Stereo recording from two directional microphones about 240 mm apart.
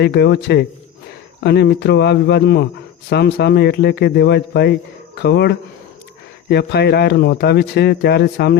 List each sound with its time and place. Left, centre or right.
0.0 s a man's voice: left